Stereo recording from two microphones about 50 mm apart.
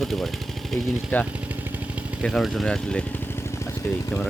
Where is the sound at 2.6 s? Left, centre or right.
Centre.